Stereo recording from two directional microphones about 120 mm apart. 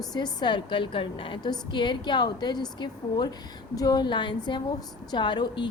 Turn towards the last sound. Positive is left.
turn(degrees=40)  # may be behind; listen again after turning